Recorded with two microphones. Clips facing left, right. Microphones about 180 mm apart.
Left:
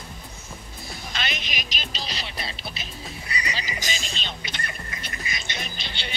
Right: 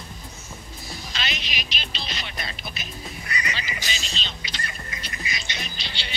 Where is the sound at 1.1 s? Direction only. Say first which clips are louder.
Left 1 dB; 50° left (ahead or behind).